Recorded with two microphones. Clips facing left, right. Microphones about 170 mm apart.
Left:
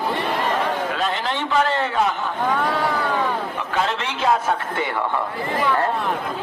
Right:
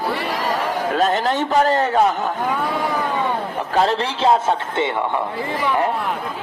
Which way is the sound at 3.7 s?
35° right (ahead or behind).